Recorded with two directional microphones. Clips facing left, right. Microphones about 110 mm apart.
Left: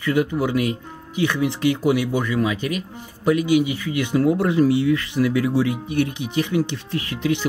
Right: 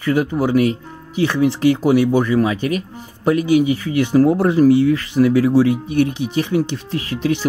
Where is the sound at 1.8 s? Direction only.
35° right (ahead or behind).